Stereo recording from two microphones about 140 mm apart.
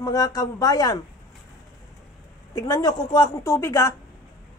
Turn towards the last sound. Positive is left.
turn(degrees=20)  # may be behind; listen again after turning